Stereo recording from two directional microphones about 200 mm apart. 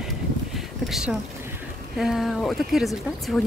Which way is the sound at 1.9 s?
Centre (ahead or behind).